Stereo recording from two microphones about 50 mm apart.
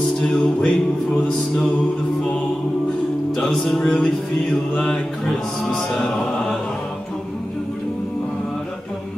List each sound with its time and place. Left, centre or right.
0.2 s music: centre
3.3 s music: centre